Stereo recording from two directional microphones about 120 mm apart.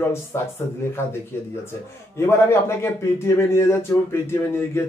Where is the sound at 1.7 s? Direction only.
20° left (ahead or behind).